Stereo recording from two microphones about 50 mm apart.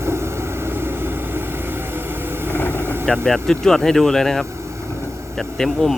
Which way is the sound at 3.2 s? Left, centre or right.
Centre.